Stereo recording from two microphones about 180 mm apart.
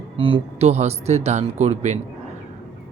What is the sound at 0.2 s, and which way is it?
Speech, 30° right (ahead or behind).